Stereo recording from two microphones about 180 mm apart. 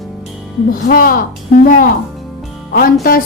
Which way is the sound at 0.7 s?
55° left (ahead or behind).